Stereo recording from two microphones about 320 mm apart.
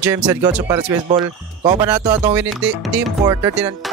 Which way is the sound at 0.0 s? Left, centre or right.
Centre.